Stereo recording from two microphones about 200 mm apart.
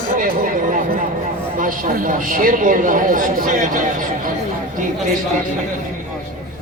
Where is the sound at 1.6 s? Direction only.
40° right (ahead or behind).